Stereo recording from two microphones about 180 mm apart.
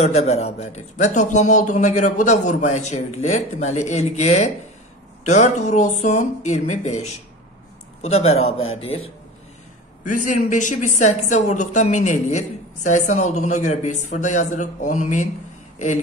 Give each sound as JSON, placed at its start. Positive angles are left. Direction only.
{"t": 0.0, "sound": "speech", "side_deg": 35}
{"t": 10.0, "sound": "speech", "side_deg": 45}